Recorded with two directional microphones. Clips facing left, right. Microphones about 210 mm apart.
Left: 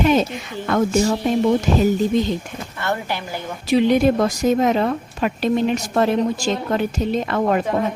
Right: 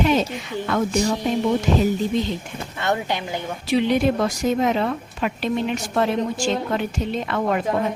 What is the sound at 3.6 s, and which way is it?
A woman's voice, 45° left (ahead or behind).